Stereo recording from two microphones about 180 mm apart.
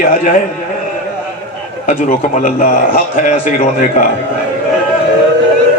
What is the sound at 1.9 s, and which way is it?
A man's voice, 45° left (ahead or behind).